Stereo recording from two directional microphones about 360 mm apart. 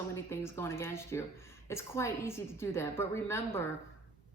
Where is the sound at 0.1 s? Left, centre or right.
Centre.